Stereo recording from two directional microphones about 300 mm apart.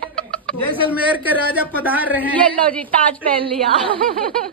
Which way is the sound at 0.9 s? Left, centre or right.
Centre.